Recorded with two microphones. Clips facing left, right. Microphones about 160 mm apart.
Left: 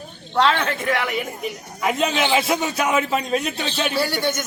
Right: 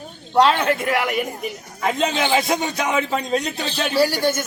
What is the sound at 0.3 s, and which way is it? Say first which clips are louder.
Speech: right 3 dB; 10° right (ahead or behind).